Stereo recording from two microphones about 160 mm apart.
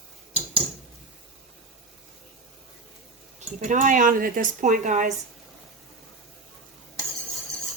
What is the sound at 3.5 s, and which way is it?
A woman's voice, 50° right (ahead or behind).